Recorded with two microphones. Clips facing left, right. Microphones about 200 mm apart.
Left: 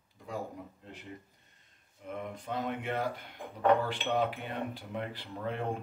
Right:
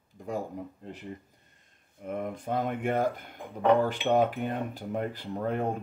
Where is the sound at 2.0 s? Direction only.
50° right (ahead or behind).